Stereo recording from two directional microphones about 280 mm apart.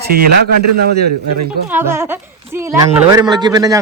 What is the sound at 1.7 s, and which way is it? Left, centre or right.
Speech, centre.